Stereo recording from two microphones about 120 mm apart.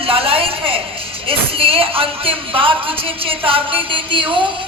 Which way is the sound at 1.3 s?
50° right (ahead or behind).